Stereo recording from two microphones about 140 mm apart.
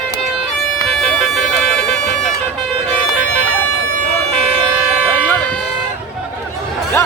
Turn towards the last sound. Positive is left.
turn(degrees=10)  # may be behind; listen again after turning